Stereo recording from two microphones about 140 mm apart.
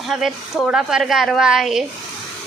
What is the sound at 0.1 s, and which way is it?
A woman's voice, 5° right (ahead or behind).